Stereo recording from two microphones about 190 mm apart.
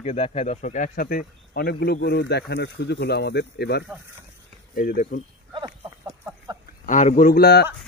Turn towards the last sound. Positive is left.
turn(degrees=55)  # may be behind; listen again after turning